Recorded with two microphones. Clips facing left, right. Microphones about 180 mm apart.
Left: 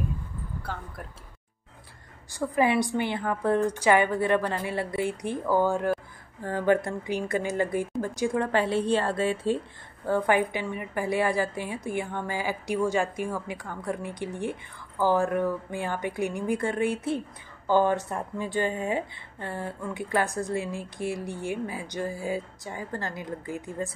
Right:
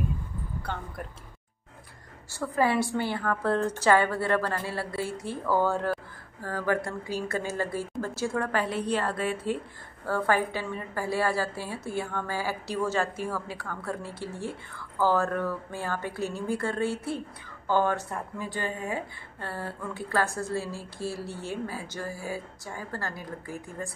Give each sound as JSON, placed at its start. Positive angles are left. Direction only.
{"t": 0.6, "sound": "speech", "side_deg": 5}
{"t": 2.3, "sound": "a woman's voice", "side_deg": 15}